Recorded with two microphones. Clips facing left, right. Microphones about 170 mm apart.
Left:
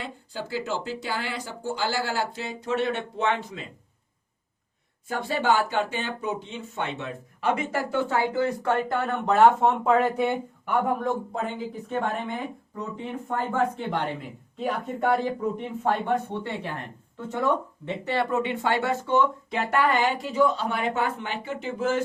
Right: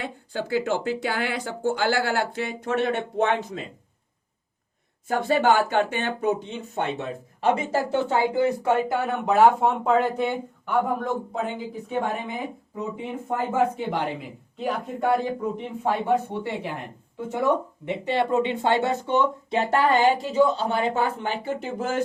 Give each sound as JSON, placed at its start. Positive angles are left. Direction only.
{"t": 0.0, "sound": "speech", "side_deg": -55}
{"t": 5.0, "sound": "speech", "side_deg": -55}
{"t": 7.0, "sound": "speech", "side_deg": -30}